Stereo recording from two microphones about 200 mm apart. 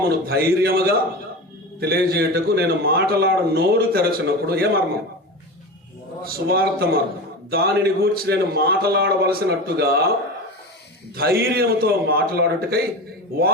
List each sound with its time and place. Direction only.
0.3 s a man's voice: 50° right (ahead or behind)
6.2 s a man's voice: 50° right (ahead or behind)
11.2 s a man's voice: 50° right (ahead or behind)